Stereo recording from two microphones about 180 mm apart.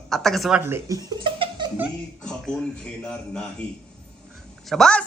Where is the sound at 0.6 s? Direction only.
15° right (ahead or behind).